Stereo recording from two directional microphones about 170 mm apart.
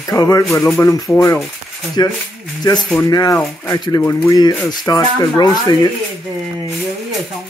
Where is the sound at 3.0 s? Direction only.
20° left (ahead or behind).